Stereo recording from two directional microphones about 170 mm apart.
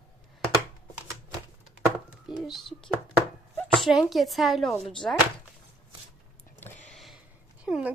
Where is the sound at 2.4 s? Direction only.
Centre (ahead or behind).